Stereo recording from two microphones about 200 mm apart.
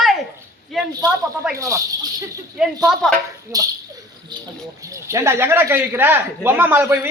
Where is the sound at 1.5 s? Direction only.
15° right (ahead or behind).